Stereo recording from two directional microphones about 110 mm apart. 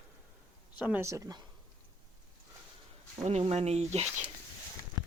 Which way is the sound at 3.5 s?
75° right (ahead or behind).